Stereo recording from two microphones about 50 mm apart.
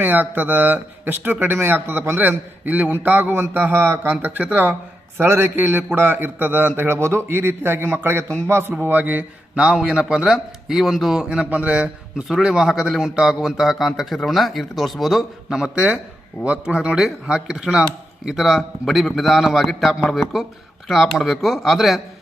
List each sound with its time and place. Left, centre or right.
0.0 s speech: right
2.1 s a man's voice: right
4.2 s speech: right
5.1 s a man's voice: right
8.8 s speech: right
9.6 s speech: centre
10.2 s speech: centre
11.4 s a man's voice: right
12.1 s a man's voice: centre
18.3 s a man's voice: centre